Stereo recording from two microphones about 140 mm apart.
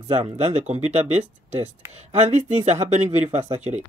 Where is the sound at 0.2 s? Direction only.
50° right (ahead or behind).